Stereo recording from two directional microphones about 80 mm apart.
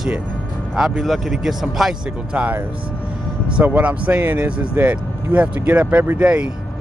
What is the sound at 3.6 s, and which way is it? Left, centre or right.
Speech, centre.